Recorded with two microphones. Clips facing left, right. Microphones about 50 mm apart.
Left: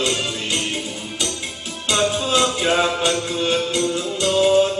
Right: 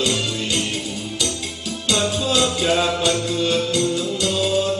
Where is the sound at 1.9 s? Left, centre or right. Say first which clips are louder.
Left 1 dB; left.